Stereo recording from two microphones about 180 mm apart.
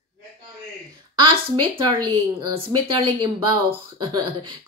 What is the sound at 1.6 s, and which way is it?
Speech, 25° right (ahead or behind).